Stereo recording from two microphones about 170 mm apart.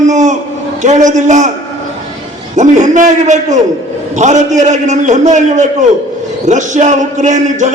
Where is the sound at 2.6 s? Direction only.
45° right (ahead or behind).